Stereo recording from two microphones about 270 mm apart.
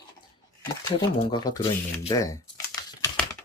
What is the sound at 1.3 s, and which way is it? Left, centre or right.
Speech, centre.